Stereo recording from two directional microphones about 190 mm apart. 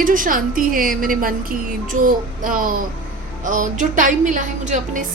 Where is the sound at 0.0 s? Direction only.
45° right (ahead or behind).